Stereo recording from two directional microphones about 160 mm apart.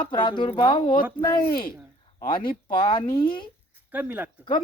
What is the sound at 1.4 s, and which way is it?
Speech, 65° left (ahead or behind).